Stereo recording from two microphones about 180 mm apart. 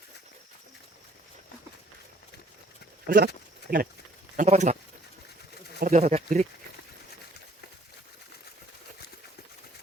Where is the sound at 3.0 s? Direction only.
60° right (ahead or behind).